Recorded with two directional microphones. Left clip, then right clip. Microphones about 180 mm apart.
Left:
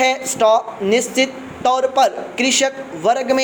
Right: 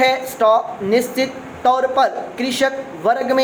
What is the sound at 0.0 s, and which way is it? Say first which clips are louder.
Speech: even; 25° left (ahead or behind).